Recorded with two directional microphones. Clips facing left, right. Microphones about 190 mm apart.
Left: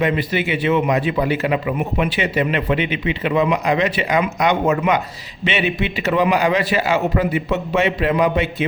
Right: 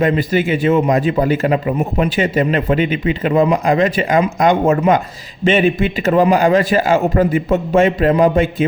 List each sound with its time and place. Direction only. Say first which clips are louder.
0.0 s a man's voice: right 4 dB; 45° right (ahead or behind)